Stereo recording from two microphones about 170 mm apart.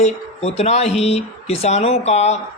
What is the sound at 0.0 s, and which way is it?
Speech, 40° left (ahead or behind).